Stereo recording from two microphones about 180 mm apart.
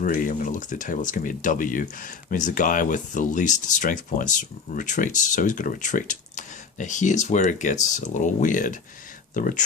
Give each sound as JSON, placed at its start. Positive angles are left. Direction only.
{"t": 0.0, "sound": "speech", "side_deg": 45}